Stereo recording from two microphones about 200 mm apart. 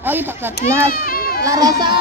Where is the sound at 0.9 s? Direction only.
45° left (ahead or behind).